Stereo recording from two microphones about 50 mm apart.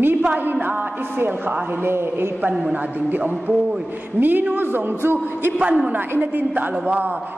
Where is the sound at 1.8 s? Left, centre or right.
Right.